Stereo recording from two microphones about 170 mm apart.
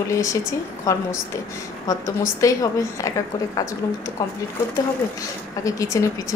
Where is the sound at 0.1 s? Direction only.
20° left (ahead or behind).